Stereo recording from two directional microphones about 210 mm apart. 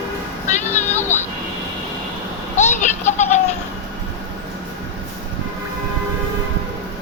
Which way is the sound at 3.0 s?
35° left (ahead or behind).